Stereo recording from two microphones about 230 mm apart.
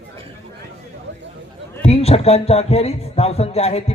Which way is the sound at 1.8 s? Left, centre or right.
Left.